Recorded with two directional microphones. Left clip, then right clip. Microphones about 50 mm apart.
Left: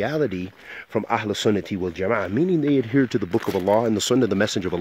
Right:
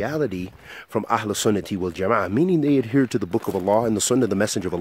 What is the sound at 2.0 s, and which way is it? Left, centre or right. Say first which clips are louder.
Speech: right 2 dB; right.